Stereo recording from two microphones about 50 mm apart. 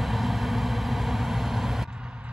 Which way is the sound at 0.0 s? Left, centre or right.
Centre.